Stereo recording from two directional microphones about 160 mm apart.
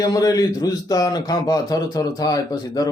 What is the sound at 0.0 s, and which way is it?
A man's voice, 20° left (ahead or behind).